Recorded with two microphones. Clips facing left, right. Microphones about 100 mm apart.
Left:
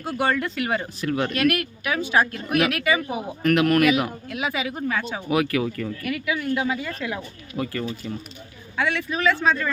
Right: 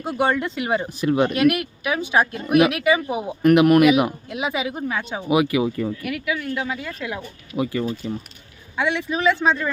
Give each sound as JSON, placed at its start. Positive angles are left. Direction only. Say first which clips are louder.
{"t": 0.0, "sound": "speech", "louder": "right 2 dB", "side_deg": -20}
{"t": 6.0, "sound": "speech", "louder": "even", "side_deg": -5}